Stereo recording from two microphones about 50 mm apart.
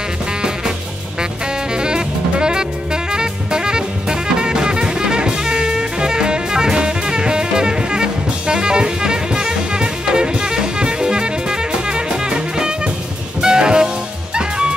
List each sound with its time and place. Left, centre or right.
1.8 s jazz: centre
13.4 s music: centre